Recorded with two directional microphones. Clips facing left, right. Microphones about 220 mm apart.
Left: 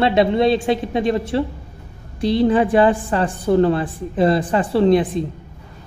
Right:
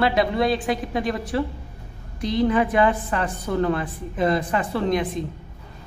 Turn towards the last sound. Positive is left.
turn(degrees=30)  # may be behind; listen again after turning